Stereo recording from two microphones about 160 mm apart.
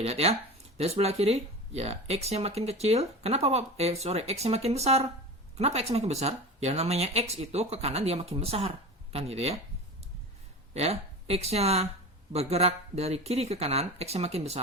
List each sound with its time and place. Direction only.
0.0 s speech: 40° right (ahead or behind)
10.8 s speech: 40° right (ahead or behind)